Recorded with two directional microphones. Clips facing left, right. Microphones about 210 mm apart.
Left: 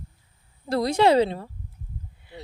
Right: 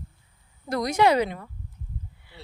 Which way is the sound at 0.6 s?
30° left (ahead or behind).